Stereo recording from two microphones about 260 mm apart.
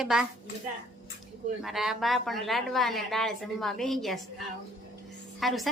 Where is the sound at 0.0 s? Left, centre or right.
Centre.